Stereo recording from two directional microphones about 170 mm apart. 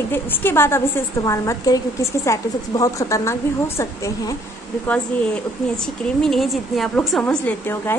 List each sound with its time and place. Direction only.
0.1 s a woman's voice: 10° left (ahead or behind)